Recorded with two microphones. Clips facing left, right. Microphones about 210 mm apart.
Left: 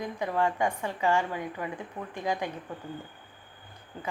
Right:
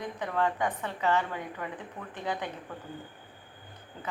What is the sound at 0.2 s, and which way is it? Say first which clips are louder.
Speech: left 2 dB; 10° left (ahead or behind).